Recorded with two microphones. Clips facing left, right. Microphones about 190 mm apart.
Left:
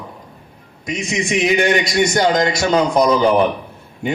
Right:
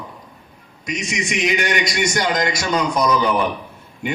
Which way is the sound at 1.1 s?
30° left (ahead or behind).